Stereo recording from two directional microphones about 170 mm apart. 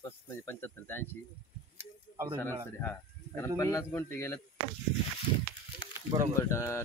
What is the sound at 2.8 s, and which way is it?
Speech, 15° left (ahead or behind).